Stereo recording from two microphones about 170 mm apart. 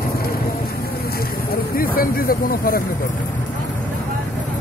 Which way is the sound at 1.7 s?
60° left (ahead or behind).